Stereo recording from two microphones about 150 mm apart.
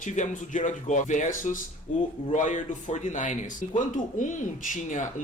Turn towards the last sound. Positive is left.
turn(degrees=55)  # may be behind; listen again after turning